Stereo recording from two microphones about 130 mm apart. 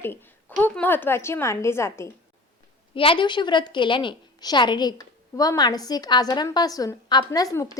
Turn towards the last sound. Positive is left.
turn(degrees=25)  # may be behind; listen again after turning